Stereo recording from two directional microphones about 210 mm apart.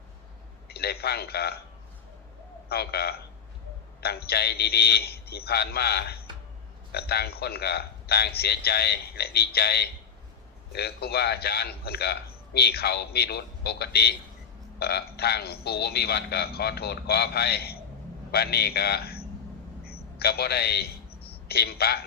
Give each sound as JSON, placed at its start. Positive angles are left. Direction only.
{"t": 0.7, "sound": "a man's voice", "side_deg": 50}
{"t": 2.6, "sound": "a man's voice", "side_deg": 50}
{"t": 19.8, "sound": "a sound", "side_deg": 45}